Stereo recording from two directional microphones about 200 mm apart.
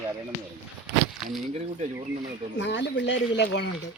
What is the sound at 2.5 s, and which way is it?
Speech, 60° left (ahead or behind).